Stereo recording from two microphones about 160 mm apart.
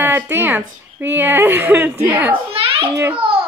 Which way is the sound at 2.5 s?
35° right (ahead or behind).